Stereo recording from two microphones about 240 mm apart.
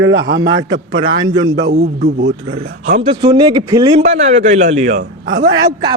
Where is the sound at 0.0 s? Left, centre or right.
Right.